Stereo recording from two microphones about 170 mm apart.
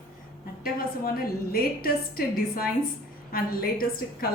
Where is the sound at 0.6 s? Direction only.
60° left (ahead or behind).